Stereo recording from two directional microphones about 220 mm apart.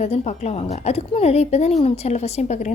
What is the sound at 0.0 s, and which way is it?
A woman's voice, 30° left (ahead or behind).